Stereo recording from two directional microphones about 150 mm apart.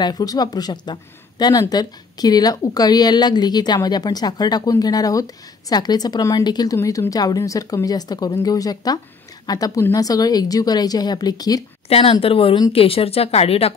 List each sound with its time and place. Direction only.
0.0 s a woman's voice: 25° left (ahead or behind)
11.9 s speech: 40° left (ahead or behind)